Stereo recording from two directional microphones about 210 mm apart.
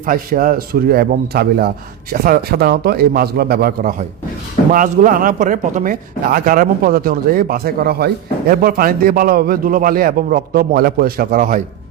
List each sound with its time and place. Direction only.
0.0 s speech: 40° right (ahead or behind)